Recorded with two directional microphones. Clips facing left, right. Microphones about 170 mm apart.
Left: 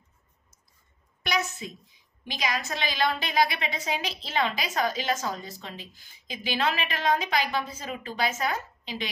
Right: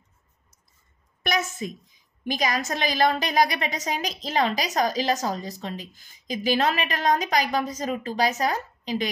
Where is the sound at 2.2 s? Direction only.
45° right (ahead or behind).